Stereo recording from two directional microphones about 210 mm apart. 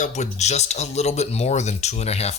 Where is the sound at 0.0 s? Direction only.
35° left (ahead or behind).